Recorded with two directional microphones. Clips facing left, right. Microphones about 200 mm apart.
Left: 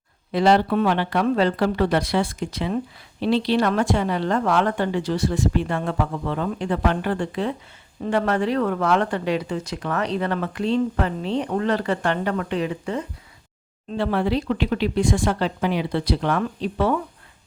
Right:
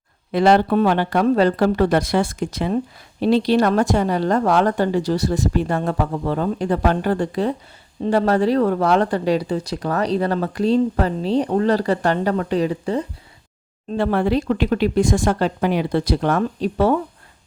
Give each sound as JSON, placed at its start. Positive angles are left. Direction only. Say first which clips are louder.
{"t": 0.3, "sound": "speech", "louder": "right 3 dB", "side_deg": -50}
{"t": 13.9, "sound": "speech", "louder": "right 3 dB", "side_deg": -50}